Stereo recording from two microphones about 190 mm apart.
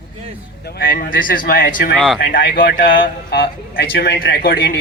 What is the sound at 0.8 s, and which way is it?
A man's voice, 50° left (ahead or behind).